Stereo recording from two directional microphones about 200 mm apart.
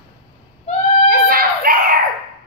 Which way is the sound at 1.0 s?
45° right (ahead or behind).